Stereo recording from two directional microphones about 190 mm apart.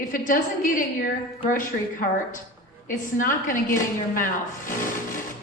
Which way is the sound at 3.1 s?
45° left (ahead or behind).